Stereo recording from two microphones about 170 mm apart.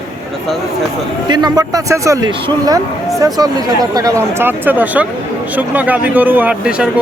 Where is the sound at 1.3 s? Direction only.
25° right (ahead or behind).